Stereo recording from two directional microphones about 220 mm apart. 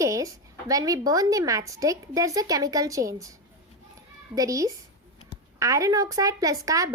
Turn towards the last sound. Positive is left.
turn(degrees=-15)  # may be behind; listen again after turning